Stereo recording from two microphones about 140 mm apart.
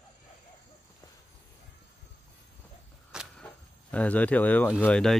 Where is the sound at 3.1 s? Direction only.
5° right (ahead or behind).